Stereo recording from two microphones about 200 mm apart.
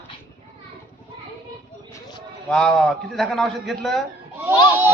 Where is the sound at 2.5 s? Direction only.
5° left (ahead or behind).